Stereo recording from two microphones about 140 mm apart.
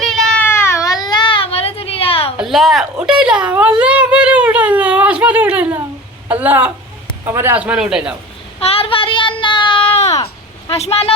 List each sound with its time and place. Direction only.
0.0 s a sound: 5° left (ahead or behind)
0.4 s baby cry: 20° left (ahead or behind); by 2.3 s 40° left (ahead or behind)
2.4 s a man's voice: centre (ahead or behind)
8.5 s child singing: 45° left (ahead or behind)
10.7 s speech: 45° left (ahead or behind)